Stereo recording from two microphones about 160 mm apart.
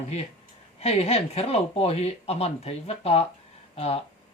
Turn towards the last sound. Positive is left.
turn(degrees=40)  # may be behind; listen again after turning